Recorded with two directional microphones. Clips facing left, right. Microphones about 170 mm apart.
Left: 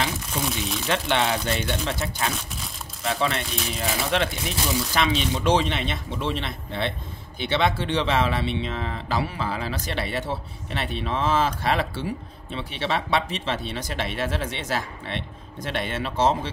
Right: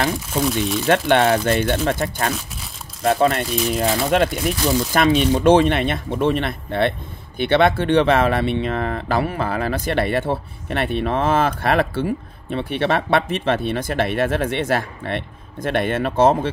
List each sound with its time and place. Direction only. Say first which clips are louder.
0.5 s speech: right 8 dB; centre (ahead or behind)
0.8 s speech: right 8 dB; 55° right (ahead or behind)